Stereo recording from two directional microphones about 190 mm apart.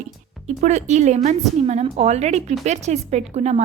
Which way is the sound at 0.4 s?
35° right (ahead or behind).